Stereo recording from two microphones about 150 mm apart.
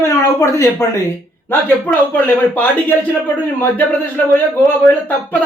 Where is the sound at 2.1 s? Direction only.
10° left (ahead or behind).